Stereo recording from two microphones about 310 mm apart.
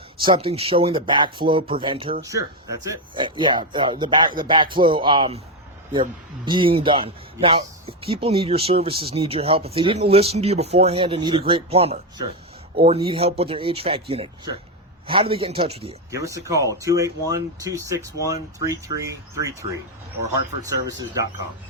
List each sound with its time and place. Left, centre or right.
0.2 s speech: centre